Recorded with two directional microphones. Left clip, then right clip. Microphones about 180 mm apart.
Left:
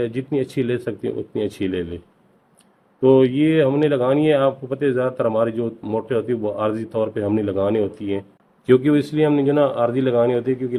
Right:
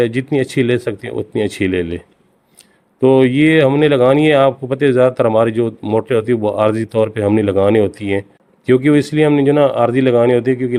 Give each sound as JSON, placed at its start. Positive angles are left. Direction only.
{"t": 0.0, "sound": "speech", "side_deg": -60}
{"t": 3.0, "sound": "speech", "side_deg": -65}
{"t": 8.6, "sound": "speech", "side_deg": -45}